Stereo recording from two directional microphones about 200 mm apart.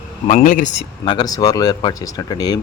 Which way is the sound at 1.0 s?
20° left (ahead or behind).